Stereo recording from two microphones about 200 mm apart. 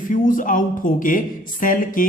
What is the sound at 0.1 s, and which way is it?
Speech, 40° left (ahead or behind).